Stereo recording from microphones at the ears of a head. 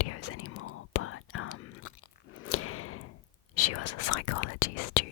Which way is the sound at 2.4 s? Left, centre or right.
Left.